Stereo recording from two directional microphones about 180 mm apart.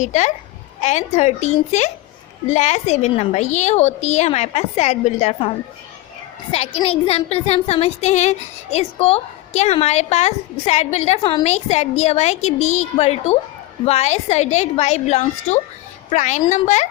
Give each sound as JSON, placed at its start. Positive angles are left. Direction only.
{"t": 0.0, "sound": "speech", "side_deg": 40}